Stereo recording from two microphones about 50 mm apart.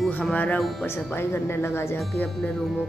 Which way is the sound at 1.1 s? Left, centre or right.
Left.